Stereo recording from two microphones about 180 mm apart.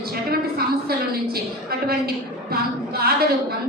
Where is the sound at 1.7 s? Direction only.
55° right (ahead or behind).